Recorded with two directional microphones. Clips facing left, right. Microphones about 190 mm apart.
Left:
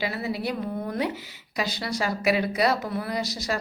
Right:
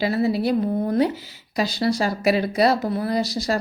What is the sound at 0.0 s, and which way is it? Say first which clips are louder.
A woman's voice: right 8 dB; 35° right (ahead or behind).